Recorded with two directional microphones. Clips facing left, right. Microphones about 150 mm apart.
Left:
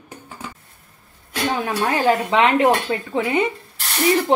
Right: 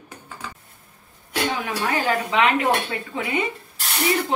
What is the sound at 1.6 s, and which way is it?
Speech, 35° left (ahead or behind).